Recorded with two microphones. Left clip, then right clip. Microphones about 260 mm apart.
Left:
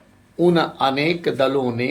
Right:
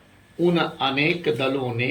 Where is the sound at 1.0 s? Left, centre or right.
Centre.